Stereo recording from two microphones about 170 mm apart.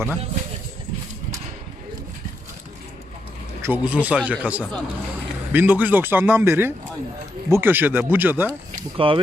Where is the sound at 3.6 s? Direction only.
10° right (ahead or behind).